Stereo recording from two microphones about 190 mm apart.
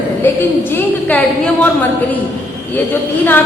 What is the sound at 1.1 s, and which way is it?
Speech, 5° left (ahead or behind).